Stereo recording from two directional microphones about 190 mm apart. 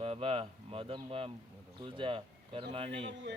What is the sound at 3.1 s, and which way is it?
Speech, 70° right (ahead or behind).